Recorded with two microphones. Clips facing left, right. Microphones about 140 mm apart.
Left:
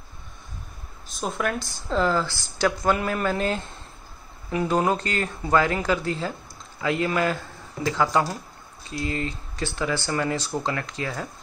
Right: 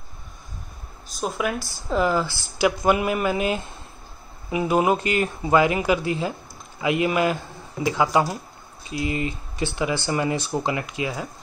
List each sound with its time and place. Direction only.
1.1 s speech: centre (ahead or behind)